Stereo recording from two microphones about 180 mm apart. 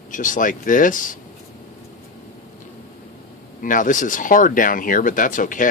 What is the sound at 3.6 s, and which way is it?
Speech, 45° left (ahead or behind).